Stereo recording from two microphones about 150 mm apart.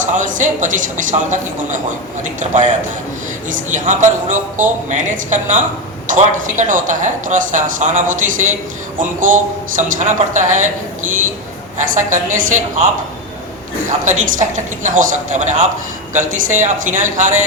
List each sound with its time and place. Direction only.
0.0 s speech: 55° right (ahead or behind)
11.9 s speech: 60° right (ahead or behind)
14.0 s speech: 55° right (ahead or behind)